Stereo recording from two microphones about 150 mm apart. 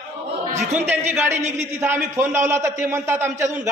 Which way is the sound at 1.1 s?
15° right (ahead or behind).